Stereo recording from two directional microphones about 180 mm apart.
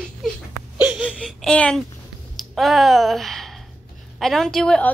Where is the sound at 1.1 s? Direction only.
5° left (ahead or behind).